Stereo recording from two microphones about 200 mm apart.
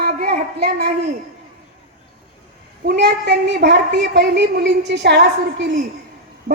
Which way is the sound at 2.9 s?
55° right (ahead or behind).